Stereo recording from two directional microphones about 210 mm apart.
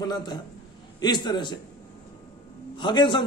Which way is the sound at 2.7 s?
20° left (ahead or behind).